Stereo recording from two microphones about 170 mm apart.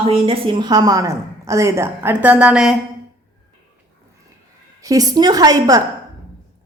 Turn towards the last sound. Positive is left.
turn(degrees=-20)  # may be behind; listen again after turning